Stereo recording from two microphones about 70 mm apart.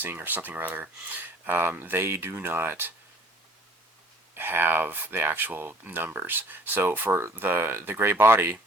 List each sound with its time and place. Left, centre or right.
0.0 s speech: right
4.4 s speech: right